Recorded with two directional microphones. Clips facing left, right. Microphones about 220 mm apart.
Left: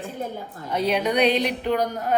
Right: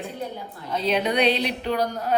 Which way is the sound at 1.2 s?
15° left (ahead or behind).